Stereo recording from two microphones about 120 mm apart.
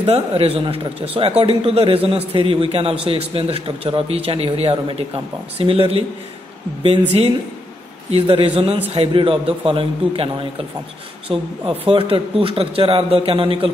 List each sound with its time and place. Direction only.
0.0 s a man's voice: 55° right (ahead or behind)